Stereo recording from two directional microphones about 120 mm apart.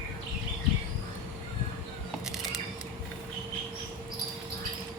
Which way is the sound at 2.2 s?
5° right (ahead or behind).